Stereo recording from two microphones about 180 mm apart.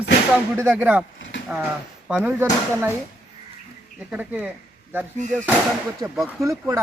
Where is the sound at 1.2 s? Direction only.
90° left.